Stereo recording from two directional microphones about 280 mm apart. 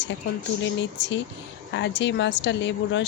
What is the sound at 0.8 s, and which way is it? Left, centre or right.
Speech, left.